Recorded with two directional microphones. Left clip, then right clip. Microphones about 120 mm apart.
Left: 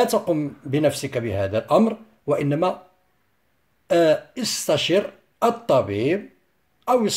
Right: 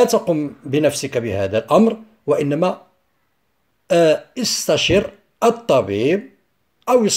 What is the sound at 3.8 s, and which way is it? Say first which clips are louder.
Speech: right 3 dB; 40° right (ahead or behind).